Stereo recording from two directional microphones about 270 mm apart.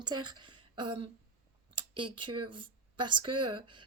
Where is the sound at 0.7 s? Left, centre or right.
Centre.